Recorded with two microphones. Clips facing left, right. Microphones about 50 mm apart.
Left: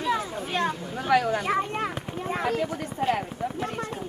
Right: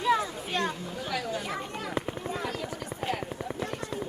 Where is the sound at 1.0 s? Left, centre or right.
Left.